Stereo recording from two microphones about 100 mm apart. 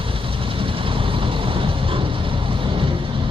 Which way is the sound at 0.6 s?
60° right (ahead or behind).